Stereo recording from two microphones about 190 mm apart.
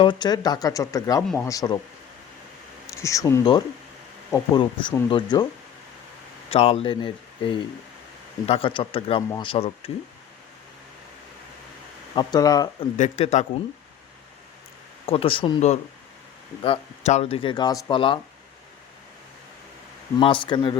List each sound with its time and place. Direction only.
0.0 s a man's voice: 25° left (ahead or behind)
2.8 s speech: 15° left (ahead or behind)
6.5 s speech: 30° left (ahead or behind)
12.1 s speech: 20° left (ahead or behind)
13.0 s speech: 35° left (ahead or behind)
15.0 s speech: 30° left (ahead or behind)
17.3 s speech: 25° left (ahead or behind)
20.1 s speech: 25° left (ahead or behind)